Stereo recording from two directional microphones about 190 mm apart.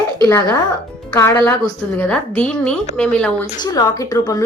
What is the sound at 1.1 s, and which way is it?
A woman's voice, 15° left (ahead or behind).